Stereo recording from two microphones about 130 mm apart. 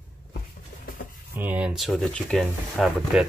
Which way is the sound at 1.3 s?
10° right (ahead or behind).